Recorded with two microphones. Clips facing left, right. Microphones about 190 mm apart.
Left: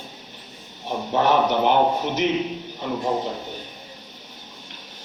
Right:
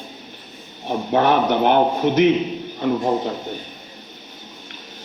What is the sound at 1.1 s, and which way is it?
A man's voice, 55° right (ahead or behind).